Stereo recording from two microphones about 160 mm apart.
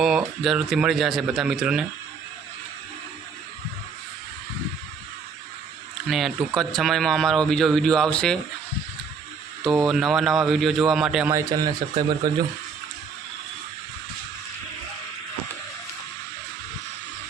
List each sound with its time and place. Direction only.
0.0 s speech: centre (ahead or behind)
6.1 s speech: centre (ahead or behind)
9.6 s speech: centre (ahead or behind)
11.3 s speech: 20° right (ahead or behind)